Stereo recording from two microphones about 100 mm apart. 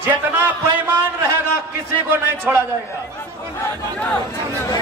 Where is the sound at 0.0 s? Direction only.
15° right (ahead or behind).